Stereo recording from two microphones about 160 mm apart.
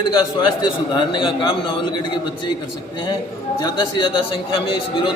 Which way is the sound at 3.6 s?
30° left (ahead or behind).